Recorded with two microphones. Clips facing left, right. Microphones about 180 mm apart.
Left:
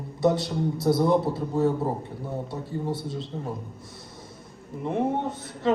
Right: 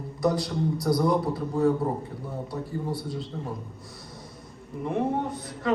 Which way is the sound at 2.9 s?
Centre (ahead or behind).